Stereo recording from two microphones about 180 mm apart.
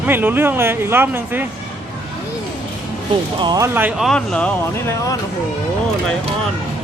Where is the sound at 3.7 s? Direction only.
10° right (ahead or behind).